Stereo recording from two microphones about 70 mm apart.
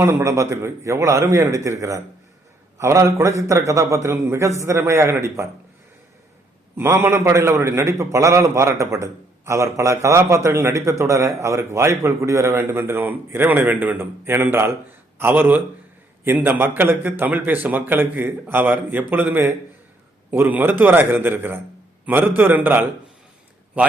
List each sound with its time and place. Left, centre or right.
0.0 s a man's voice: right
6.7 s a man's voice: right